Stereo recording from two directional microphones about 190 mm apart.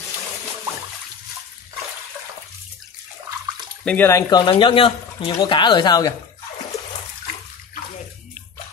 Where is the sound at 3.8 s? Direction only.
10° left (ahead or behind).